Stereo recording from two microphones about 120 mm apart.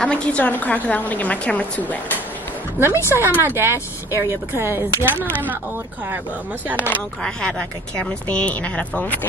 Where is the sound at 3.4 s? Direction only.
20° right (ahead or behind).